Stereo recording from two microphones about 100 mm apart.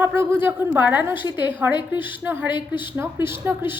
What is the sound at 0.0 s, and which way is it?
A woman's voice, 20° right (ahead or behind).